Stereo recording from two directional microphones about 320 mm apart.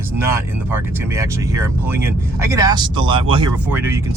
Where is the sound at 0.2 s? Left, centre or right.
Centre.